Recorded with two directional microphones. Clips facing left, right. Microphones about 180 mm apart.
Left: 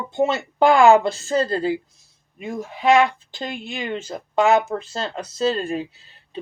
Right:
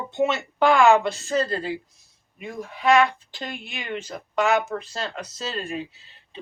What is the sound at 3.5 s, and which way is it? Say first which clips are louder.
Speech: left 5 dB; 30° left (ahead or behind).